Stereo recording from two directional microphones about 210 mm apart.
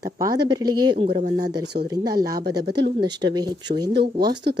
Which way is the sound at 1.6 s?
50° right (ahead or behind).